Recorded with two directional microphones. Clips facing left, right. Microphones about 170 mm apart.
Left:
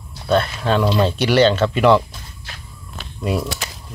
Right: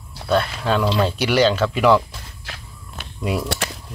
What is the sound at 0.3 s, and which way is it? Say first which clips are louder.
Speech: left 2 dB; 10° right (ahead or behind).